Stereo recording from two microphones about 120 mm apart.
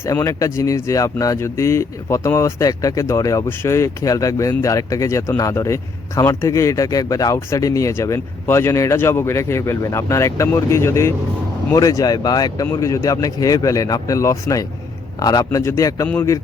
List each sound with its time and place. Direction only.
0.0 s speech: 25° left (ahead or behind)